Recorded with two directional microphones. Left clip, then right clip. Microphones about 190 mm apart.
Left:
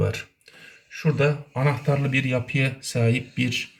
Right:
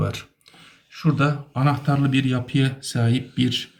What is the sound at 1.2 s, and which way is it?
Speech, 35° left (ahead or behind).